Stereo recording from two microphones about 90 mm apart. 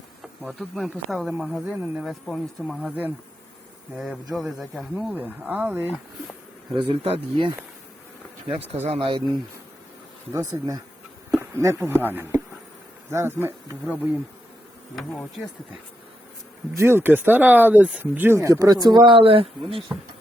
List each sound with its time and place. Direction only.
0.6 s speech: centre (ahead or behind)
4.0 s speech: 5° right (ahead or behind)
5.1 s speech: 20° right (ahead or behind)
6.7 s speech: 65° right (ahead or behind)
8.4 s speech: 80° right
10.3 s speech: 40° right (ahead or behind)
11.3 s a sound: 30° right (ahead or behind)
11.8 s speech: 25° right (ahead or behind)
13.8 s speech: 15° right (ahead or behind)
16.7 s speech: 25° right (ahead or behind)
18.3 s speech: 35° right (ahead or behind)
19.1 s speech: 90° right
19.9 s speech: 30° right (ahead or behind)